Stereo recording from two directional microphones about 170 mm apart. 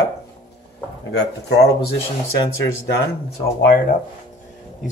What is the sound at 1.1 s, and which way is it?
Speech, 80° left.